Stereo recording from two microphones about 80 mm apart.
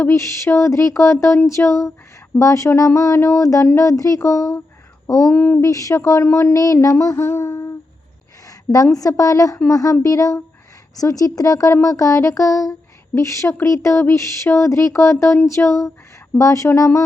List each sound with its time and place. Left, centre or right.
0.0 s speech: left
5.3 s speech: left
5.5 s speech: left
6.7 s speech: left
7.2 s humming: left
8.4 s a sound: left
9.0 s speech: left